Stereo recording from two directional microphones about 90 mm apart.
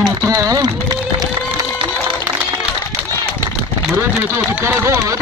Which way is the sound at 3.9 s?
30° right (ahead or behind).